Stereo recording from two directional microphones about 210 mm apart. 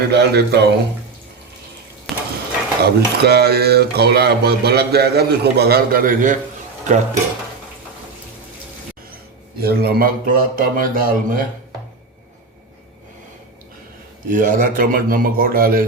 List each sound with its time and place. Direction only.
0.1 s speech: 50° right (ahead or behind)
2.1 s a sound: centre (ahead or behind)
2.8 s speech: 50° right (ahead or behind)
6.8 s a sound: 35° right (ahead or behind)
9.6 s speech: 50° right (ahead or behind)
14.3 s speech: 40° right (ahead or behind)